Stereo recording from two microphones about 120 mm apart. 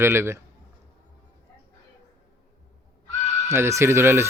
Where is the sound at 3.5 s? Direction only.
20° right (ahead or behind).